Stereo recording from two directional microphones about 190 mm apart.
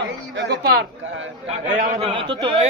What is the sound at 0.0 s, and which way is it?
Speech, 65° right (ahead or behind).